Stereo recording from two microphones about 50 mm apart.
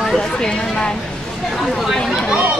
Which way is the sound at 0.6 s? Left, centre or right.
Centre.